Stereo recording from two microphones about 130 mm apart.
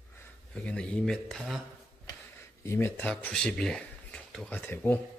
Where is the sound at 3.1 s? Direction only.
10° left (ahead or behind).